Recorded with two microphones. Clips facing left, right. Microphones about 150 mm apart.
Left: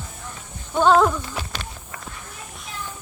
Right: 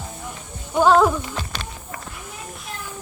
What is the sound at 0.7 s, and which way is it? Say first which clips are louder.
Speech: right 1 dB; 5° right (ahead or behind).